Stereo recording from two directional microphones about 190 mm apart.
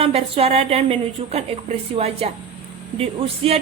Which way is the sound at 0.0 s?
30° right (ahead or behind).